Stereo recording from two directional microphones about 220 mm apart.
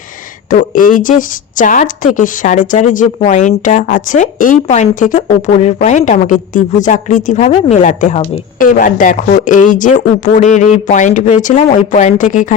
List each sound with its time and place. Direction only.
0.5 s speech: 40° left (ahead or behind)